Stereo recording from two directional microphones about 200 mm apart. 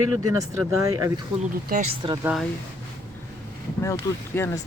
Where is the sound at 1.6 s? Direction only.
40° right (ahead or behind).